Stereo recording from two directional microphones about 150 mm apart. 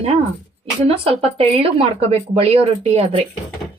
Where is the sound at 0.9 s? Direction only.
40° right (ahead or behind).